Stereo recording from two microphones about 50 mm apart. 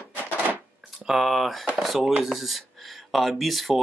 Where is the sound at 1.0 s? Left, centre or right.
Centre.